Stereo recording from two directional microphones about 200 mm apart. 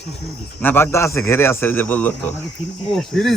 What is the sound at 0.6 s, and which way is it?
Speech, 10° left (ahead or behind).